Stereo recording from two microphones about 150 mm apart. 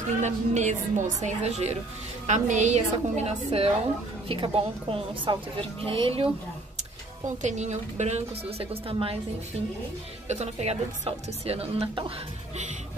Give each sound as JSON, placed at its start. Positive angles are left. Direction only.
{"t": 0.2, "sound": "a woman's voice", "side_deg": -50}
{"t": 7.4, "sound": "a woman's voice", "side_deg": -50}
{"t": 10.2, "sound": "a woman's voice", "side_deg": -50}